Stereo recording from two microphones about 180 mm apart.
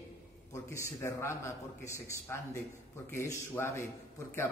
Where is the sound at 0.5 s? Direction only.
15° left (ahead or behind).